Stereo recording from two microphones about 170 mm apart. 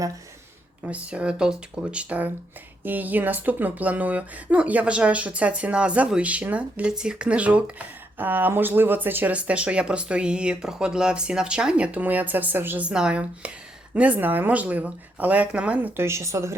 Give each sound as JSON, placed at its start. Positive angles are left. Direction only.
{"t": 0.9, "sound": "speech", "side_deg": -5}